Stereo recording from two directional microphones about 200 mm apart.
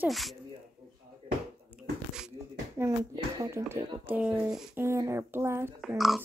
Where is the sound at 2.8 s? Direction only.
10° right (ahead or behind).